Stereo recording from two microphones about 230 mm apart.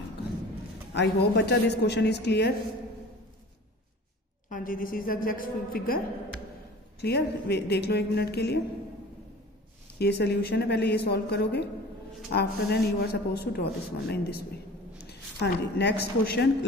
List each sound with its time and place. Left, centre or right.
0.9 s a man's voice: left
4.5 s a woman's voice: left
7.0 s a man's voice: left
9.9 s a man's voice: left